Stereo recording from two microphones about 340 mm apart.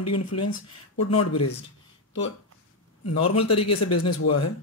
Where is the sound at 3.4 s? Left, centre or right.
Centre.